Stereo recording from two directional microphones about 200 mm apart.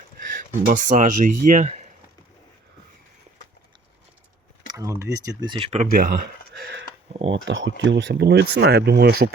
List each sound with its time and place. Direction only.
0.3 s speech: 40° right (ahead or behind)
4.7 s speech: 15° right (ahead or behind); by 6.8 s 55° right (ahead or behind)
7.3 s speech: 65° right (ahead or behind); by 9.3 s 50° right (ahead or behind)